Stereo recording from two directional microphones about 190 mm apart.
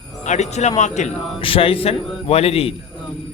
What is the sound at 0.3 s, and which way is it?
A man's voice, 35° left (ahead or behind).